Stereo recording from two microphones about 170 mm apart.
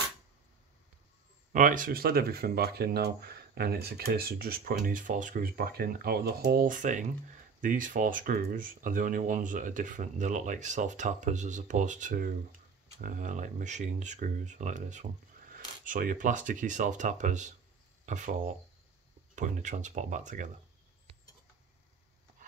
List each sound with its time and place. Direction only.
1.5 s speech: 50° right (ahead or behind)